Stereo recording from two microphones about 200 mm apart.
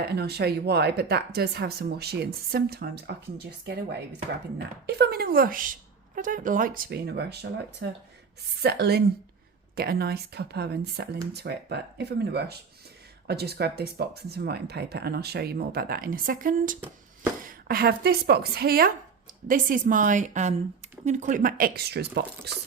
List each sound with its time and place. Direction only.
0.2 s speech: 55° right (ahead or behind)
4.5 s speech: 55° right (ahead or behind)
8.6 s a woman's voice: 55° right (ahead or behind)